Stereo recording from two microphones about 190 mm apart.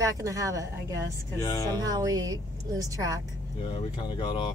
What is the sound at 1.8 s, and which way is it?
A woman's voice, 20° right (ahead or behind).